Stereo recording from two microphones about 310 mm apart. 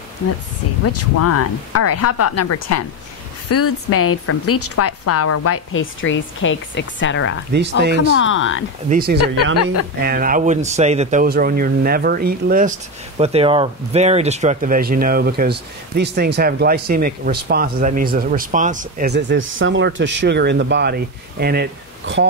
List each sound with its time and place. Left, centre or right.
0.8 s speech: left
7.8 s speech: right
8.1 s speech: left
8.8 s speech: right
9.4 s speech: left
9.9 s speech: right